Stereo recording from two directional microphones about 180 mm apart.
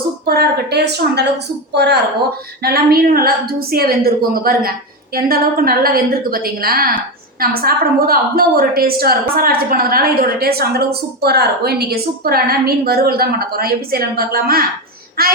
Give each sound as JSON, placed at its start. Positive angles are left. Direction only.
{"t": 0.3, "sound": "a woman's voice", "side_deg": -60}
{"t": 2.6, "sound": "a woman's voice", "side_deg": -60}